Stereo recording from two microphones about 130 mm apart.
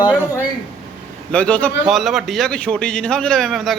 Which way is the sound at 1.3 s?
10° left (ahead or behind).